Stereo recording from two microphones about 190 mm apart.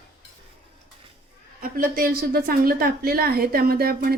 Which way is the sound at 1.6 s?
50° right (ahead or behind).